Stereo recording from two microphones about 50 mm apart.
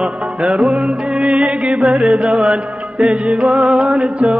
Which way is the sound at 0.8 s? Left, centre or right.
Centre.